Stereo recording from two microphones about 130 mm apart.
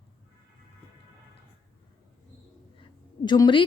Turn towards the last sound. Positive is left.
turn(degrees=35)  # may be behind; listen again after turning